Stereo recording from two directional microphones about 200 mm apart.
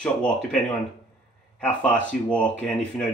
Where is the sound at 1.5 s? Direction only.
5° left (ahead or behind).